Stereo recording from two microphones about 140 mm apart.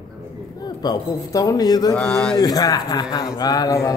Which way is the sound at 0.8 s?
25° left (ahead or behind).